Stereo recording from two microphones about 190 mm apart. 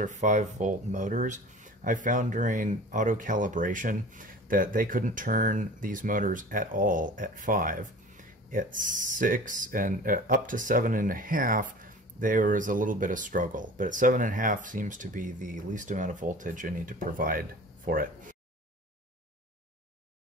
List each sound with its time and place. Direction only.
0.0 s speech: 40° right (ahead or behind)